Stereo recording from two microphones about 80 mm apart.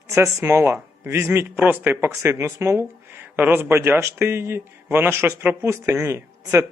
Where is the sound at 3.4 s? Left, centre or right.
Right.